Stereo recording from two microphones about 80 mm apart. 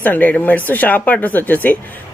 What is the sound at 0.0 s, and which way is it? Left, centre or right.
Speech, left.